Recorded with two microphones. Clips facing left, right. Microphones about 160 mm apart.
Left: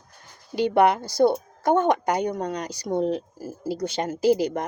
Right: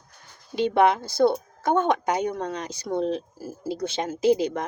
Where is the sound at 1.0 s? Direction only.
15° left (ahead or behind).